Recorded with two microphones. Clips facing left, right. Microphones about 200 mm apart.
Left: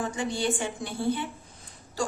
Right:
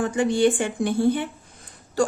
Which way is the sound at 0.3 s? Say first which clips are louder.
Right 10 dB; 55° right (ahead or behind).